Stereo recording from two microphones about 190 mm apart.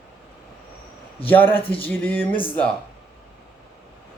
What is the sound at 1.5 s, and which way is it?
Speech, 30° left (ahead or behind).